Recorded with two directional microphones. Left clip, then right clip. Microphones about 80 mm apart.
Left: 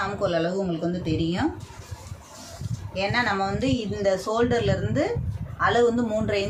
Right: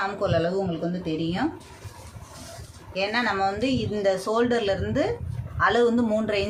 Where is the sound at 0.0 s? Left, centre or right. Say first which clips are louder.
Even; right.